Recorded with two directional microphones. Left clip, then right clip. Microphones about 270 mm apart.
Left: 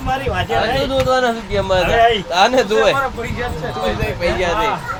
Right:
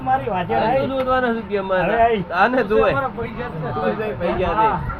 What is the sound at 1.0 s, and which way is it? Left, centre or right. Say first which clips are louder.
Speech: left 3 dB; centre.